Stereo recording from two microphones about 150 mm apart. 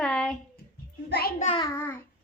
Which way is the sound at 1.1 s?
90° left.